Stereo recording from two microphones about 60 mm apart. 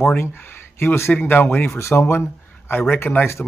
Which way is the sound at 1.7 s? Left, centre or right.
Left.